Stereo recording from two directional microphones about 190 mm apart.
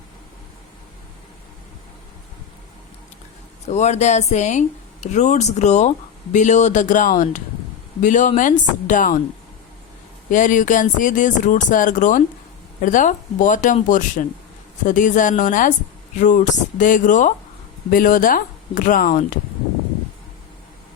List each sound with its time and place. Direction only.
3.7 s speech: 35° left (ahead or behind)
10.3 s speech: 45° left (ahead or behind)